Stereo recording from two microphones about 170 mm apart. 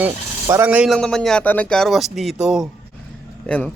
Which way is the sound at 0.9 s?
5° left (ahead or behind).